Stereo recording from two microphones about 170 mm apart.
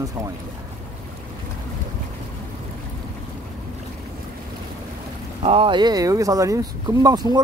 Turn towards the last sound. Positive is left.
turn(degrees=-20)  # may be behind; listen again after turning